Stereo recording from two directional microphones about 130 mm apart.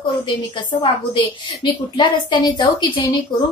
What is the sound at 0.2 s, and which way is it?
A woman's voice, 35° left (ahead or behind).